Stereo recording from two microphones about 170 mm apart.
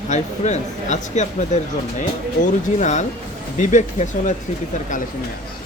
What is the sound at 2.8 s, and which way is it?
Speech, 45° left (ahead or behind).